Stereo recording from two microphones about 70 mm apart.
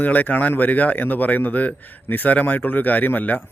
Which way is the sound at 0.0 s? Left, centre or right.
Left.